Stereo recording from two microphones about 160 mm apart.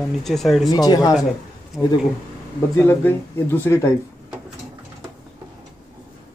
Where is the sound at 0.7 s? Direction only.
25° left (ahead or behind).